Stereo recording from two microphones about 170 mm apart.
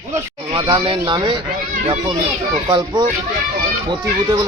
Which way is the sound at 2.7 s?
25° right (ahead or behind).